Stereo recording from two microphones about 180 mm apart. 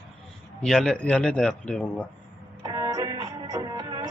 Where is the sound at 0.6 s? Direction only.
5° left (ahead or behind).